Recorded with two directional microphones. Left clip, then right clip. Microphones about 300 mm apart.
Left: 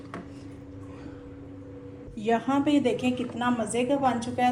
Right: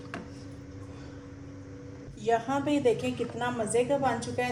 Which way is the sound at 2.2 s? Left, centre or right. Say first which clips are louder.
Left 2 dB; left.